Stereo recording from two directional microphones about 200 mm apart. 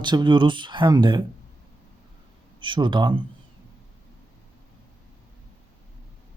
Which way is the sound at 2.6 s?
25° right (ahead or behind).